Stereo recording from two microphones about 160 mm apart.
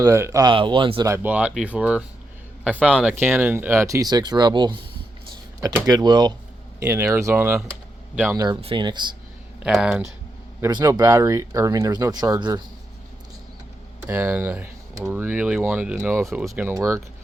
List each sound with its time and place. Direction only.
0.0 s speech: 20° right (ahead or behind)
1.0 s speech: 15° right (ahead or behind)
5.8 s speech: 25° right (ahead or behind); by 8.4 s 10° right (ahead or behind)
8.6 s speech: 30° right (ahead or behind)
9.6 s speech: 5° right (ahead or behind)
10.6 s speech: 25° right (ahead or behind)
14.1 s speech: 15° right (ahead or behind)
16.2 s speech: centre (ahead or behind)
16.5 s speech: 15° right (ahead or behind)